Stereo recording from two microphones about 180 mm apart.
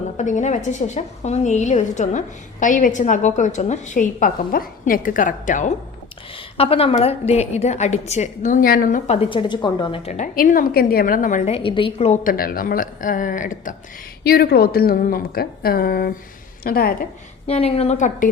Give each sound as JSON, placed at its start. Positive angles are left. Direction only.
{"t": 0.2, "sound": "a woman's voice", "side_deg": 40}
{"t": 6.3, "sound": "a woman's voice", "side_deg": 30}
{"t": 9.0, "sound": "a woman's voice", "side_deg": 30}
{"t": 12.2, "sound": "a woman's voice", "side_deg": 55}
{"t": 14.3, "sound": "a woman's voice", "side_deg": 55}
{"t": 17.4, "sound": "a woman's voice", "side_deg": 35}